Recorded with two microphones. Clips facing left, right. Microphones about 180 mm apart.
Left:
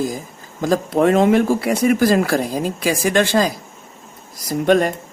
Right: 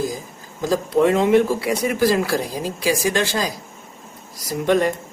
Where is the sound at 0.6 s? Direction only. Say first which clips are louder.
Left 1 dB; 55° left (ahead or behind).